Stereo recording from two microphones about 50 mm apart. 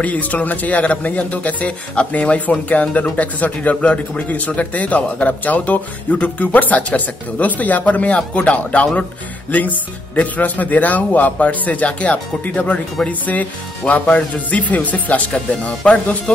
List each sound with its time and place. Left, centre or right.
0.0 s speech: left
15.3 s speech: centre